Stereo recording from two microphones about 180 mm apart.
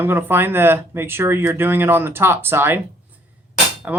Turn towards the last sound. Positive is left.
turn(degrees=-10)  # may be behind; listen again after turning